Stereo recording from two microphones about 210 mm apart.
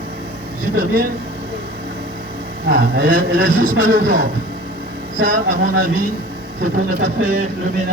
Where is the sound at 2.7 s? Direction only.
40° right (ahead or behind).